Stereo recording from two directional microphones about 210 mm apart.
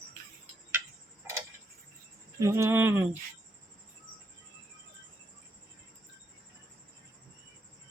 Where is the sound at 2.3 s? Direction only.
15° right (ahead or behind).